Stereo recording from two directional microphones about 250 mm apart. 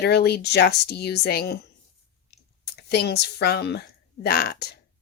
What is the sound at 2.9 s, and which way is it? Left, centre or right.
Speech, left.